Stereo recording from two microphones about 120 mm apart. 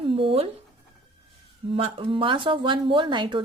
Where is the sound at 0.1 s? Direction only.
50° right (ahead or behind).